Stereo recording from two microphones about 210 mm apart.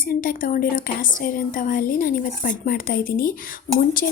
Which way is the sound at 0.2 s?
40° left (ahead or behind).